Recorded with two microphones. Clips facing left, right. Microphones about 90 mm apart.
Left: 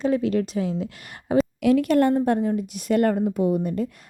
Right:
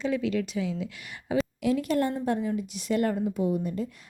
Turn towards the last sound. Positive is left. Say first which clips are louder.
# left 5 dB
turn(degrees=60)  # may be behind; listen again after turning